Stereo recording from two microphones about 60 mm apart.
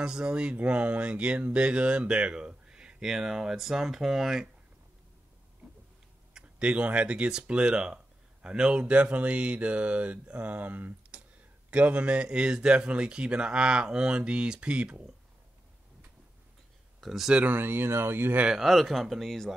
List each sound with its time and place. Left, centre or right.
0.0 s speech: centre
6.3 s speech: centre
17.0 s speech: centre
17.3 s speech: right
18.5 s speech: centre